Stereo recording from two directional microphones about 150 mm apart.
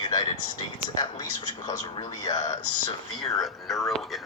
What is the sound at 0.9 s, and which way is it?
Speech, 30° left (ahead or behind).